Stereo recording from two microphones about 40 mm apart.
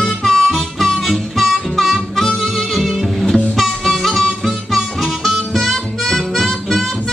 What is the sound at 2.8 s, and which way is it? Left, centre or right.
Music, centre.